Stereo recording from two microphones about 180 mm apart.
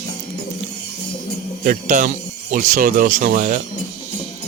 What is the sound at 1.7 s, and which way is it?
Speech, 45° right (ahead or behind).